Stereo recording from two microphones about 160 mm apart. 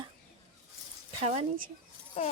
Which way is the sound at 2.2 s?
45° left (ahead or behind).